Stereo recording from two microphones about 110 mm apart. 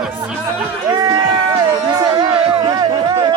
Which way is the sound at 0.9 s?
40° right (ahead or behind).